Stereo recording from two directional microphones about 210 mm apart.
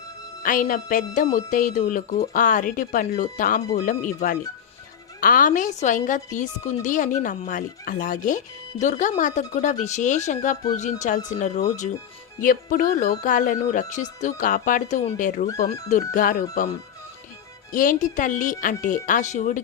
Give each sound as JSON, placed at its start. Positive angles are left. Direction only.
{"t": 0.4, "sound": "a woman's voice", "side_deg": 40}
{"t": 17.7, "sound": "a woman's voice", "side_deg": 40}